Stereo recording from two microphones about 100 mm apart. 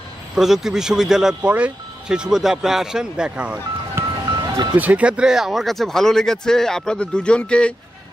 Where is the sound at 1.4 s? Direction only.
15° right (ahead or behind).